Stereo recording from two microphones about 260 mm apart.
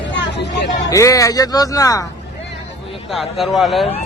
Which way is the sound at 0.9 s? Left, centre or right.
Centre.